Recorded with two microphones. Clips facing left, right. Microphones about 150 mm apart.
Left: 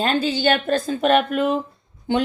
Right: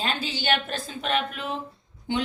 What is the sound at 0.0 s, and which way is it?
A woman's voice, 45° left (ahead or behind).